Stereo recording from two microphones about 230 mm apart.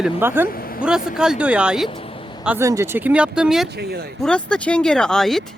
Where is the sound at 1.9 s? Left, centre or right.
Left.